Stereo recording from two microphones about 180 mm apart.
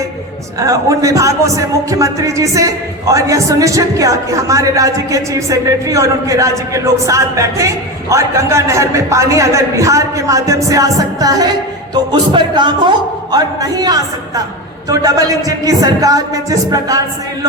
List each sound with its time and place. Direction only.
0.6 s speech: 20° right (ahead or behind)
12.3 s music: 25° right (ahead or behind)